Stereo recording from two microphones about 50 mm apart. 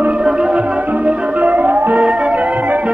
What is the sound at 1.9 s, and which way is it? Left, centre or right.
Music, right.